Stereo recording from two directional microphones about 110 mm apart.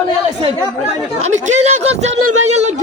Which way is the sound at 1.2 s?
90° right.